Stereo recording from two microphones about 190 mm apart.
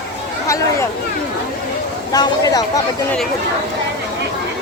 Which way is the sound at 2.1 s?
20° left (ahead or behind).